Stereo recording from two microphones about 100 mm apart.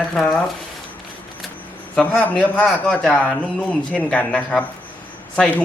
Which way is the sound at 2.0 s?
20° left (ahead or behind).